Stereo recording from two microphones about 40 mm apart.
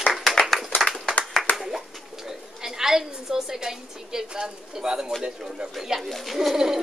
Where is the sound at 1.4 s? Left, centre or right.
Centre.